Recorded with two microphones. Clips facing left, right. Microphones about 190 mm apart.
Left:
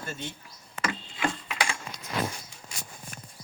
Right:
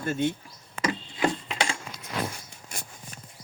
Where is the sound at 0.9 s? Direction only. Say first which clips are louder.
Right 6 dB; 35° right (ahead or behind).